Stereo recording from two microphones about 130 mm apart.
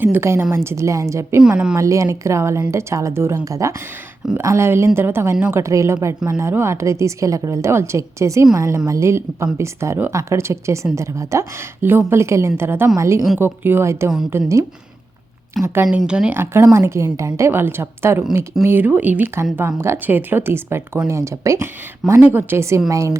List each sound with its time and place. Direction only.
0.0 s a woman's voice: 20° right (ahead or behind)
1.4 s speech: 5° right (ahead or behind)
1.7 s a woman's voice: 25° right (ahead or behind)
15.6 s speech: 20° right (ahead or behind)
16.0 s a woman's voice: 10° right (ahead or behind); by 23.1 s 25° right (ahead or behind)